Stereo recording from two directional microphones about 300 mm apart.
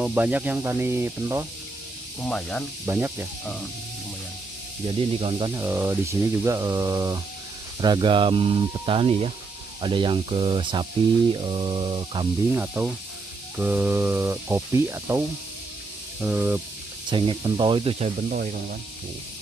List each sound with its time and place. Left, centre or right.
0.0 s speech: centre
2.2 s speech: centre
4.8 s speech: centre
17.1 s speech: centre